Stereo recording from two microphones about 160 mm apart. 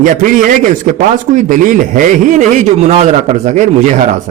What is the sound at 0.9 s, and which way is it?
A man's voice, 55° right (ahead or behind).